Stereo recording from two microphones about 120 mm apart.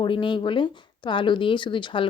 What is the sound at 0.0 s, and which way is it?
Speech, 45° left (ahead or behind).